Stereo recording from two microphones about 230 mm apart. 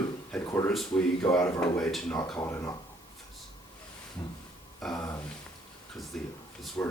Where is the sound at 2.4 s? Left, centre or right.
Centre.